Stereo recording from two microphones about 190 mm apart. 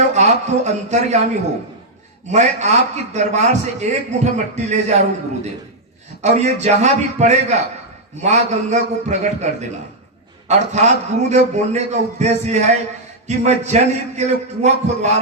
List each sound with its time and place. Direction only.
0.1 s a man's voice: 35° right (ahead or behind)
2.2 s a man's voice: 35° right (ahead or behind)
6.2 s a man's voice: 35° right (ahead or behind)